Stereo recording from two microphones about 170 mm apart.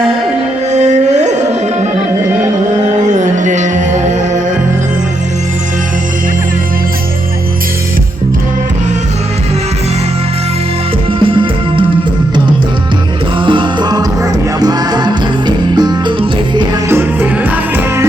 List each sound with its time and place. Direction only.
0.7 s music: 45° right (ahead or behind)
3.0 s music: 45° right (ahead or behind)
11.2 s music: 30° right (ahead or behind)
13.4 s music: 30° right (ahead or behind)
16.9 s music: 15° right (ahead or behind)